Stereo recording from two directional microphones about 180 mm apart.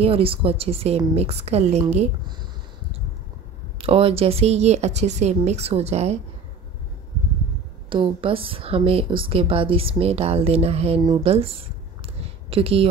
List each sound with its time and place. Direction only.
0.0 s speech: 30° right (ahead or behind)
3.7 s speech: 30° right (ahead or behind)
7.9 s speech: 30° right (ahead or behind)
11.1 s a sound: 30° right (ahead or behind)